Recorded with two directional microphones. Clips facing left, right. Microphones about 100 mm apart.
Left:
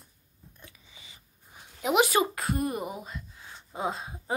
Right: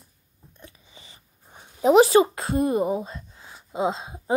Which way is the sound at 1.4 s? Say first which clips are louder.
Right 10 dB; 35° right (ahead or behind).